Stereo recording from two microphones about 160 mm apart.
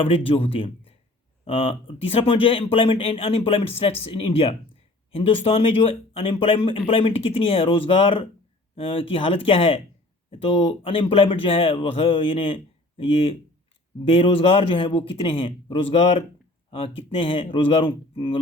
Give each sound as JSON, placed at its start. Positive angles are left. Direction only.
{"t": 0.0, "sound": "speech", "side_deg": 35}